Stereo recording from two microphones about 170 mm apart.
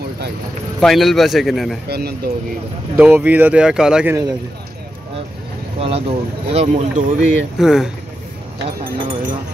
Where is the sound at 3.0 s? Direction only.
10° right (ahead or behind).